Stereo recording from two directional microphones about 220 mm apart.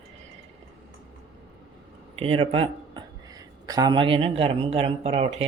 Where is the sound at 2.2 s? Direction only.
25° right (ahead or behind).